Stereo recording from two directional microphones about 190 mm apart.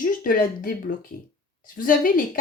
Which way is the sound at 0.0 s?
45° left (ahead or behind).